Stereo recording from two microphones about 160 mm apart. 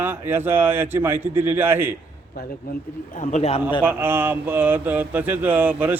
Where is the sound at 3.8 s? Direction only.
15° right (ahead or behind).